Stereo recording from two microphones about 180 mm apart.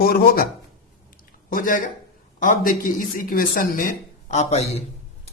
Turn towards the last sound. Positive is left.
turn(degrees=35)  # may be behind; listen again after turning